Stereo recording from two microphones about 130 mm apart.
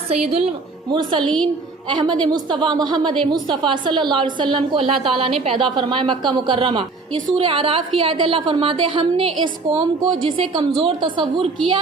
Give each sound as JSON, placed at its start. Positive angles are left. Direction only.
{"t": 0.1, "sound": "a woman's voice", "side_deg": -50}
{"t": 1.2, "sound": "a woman's voice", "side_deg": 5}
{"t": 1.9, "sound": "a woman's voice", "side_deg": -40}